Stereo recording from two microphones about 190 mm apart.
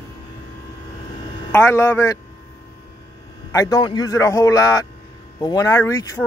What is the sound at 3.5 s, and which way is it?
A man's voice, 20° left (ahead or behind).